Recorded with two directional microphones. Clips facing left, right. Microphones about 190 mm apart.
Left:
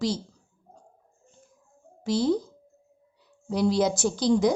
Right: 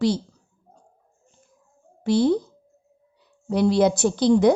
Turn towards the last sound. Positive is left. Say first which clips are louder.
# right 5 dB
turn(degrees=-60)  # may be behind; listen again after turning